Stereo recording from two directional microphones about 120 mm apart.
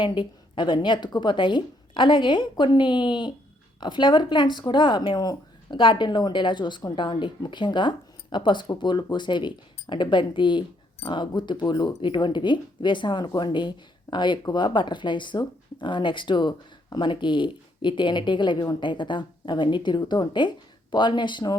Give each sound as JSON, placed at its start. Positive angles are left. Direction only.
{"t": 0.0, "sound": "speech", "side_deg": 40}